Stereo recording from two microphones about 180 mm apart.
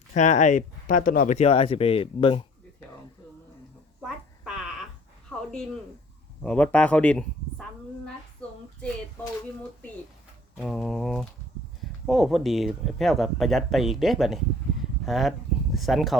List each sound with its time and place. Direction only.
0.1 s speech: 40° left (ahead or behind)
6.4 s speech: 5° left (ahead or behind)
8.0 s child singing: 5° left (ahead or behind)
10.6 s speech: centre (ahead or behind)